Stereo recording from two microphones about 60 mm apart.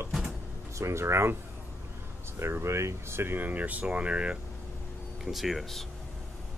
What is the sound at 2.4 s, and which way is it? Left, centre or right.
Speech, right.